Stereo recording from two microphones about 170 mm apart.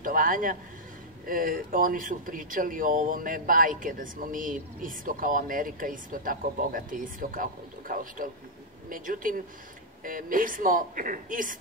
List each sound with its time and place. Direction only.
0.0 s a man's voice: 55° right (ahead or behind)